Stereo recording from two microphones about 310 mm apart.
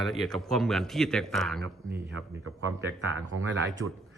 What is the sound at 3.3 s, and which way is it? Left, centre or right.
Speech, right.